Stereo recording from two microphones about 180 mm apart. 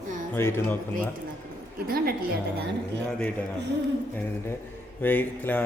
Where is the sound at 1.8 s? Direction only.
55° right (ahead or behind).